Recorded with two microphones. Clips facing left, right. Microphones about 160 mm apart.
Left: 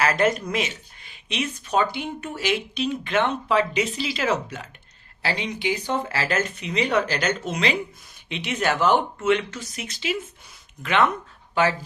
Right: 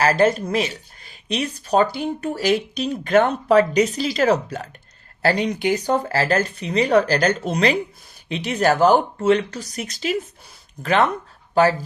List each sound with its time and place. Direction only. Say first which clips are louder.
0.0 s speech: right 4 dB; 30° right (ahead or behind)